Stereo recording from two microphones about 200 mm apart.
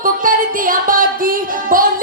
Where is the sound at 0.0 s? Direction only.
45° right (ahead or behind).